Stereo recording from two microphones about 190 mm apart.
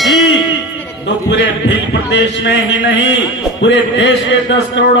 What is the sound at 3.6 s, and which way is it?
Speech, 70° left (ahead or behind).